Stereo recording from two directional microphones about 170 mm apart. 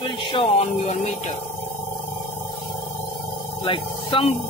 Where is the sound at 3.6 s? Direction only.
30° left (ahead or behind).